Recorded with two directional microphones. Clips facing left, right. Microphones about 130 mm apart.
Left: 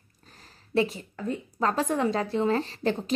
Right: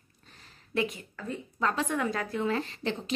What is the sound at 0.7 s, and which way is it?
A woman's voice, 30° left (ahead or behind).